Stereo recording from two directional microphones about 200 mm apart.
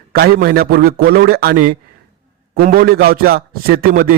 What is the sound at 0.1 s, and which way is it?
A man's voice, 50° right (ahead or behind).